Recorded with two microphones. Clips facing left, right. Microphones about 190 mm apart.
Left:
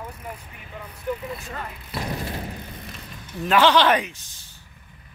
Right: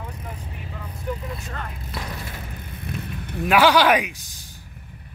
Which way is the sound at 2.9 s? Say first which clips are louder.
Right 7 dB; 60° right (ahead or behind).